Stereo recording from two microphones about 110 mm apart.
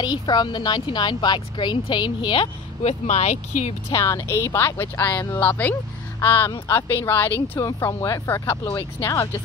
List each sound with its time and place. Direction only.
0.0 s speech: 40° left (ahead or behind)
2.8 s speech: 90° left
3.9 s speech: 25° left (ahead or behind)